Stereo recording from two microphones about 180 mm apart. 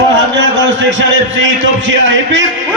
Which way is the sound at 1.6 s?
90° right.